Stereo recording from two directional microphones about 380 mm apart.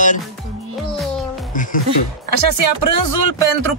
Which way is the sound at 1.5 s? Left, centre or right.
Left.